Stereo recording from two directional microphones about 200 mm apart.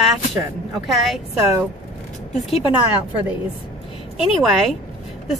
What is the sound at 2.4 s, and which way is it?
Speech, 30° left (ahead or behind).